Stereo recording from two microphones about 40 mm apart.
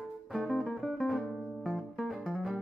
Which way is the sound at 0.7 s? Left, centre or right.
Centre.